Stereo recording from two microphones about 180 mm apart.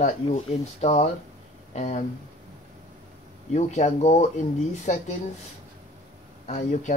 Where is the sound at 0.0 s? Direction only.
40° left (ahead or behind).